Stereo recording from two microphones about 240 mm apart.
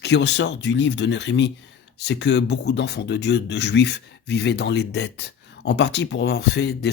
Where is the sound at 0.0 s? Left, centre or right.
Left.